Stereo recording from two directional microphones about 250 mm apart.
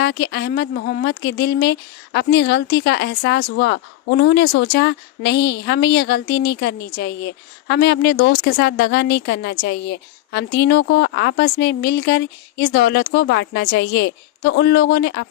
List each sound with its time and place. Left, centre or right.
0.0 s speech: left